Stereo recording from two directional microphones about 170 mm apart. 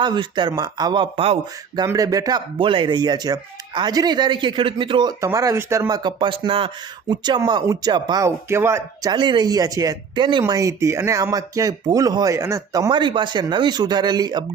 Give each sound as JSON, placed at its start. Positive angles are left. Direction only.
{"t": 0.0, "sound": "speech", "side_deg": -25}
{"t": 1.7, "sound": "speech", "side_deg": -20}
{"t": 9.1, "sound": "speech", "side_deg": -25}